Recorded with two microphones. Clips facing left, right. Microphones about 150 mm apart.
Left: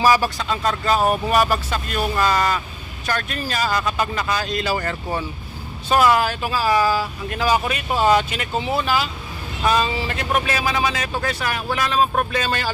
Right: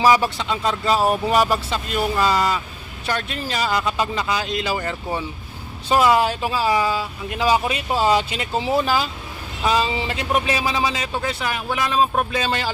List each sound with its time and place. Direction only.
0.1 s speech: 20° right (ahead or behind)
0.9 s speech: 20° left (ahead or behind)
1.3 s speech: 20° right (ahead or behind)
9.6 s speech: 25° right (ahead or behind)